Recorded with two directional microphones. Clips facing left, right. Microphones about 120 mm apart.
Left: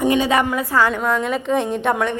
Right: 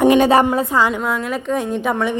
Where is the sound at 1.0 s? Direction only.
5° right (ahead or behind).